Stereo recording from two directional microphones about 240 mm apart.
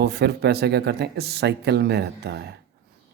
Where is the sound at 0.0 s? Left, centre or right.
Right.